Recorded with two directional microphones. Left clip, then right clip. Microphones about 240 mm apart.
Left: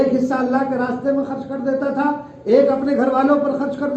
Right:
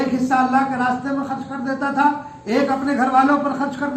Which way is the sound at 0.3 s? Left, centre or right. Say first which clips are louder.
Right 3 dB; right.